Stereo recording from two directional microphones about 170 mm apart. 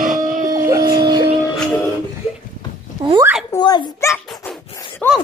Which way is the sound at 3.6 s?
25° left (ahead or behind).